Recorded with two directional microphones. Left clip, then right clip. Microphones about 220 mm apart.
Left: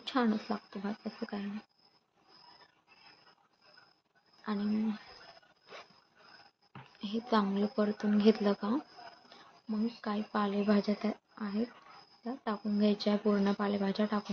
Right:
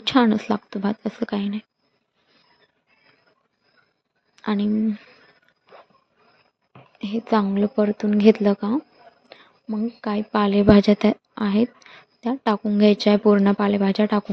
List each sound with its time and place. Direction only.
0.0 s speech: 45° right (ahead or behind)
4.4 s speech: 45° right (ahead or behind)
7.0 s speech: 35° right (ahead or behind)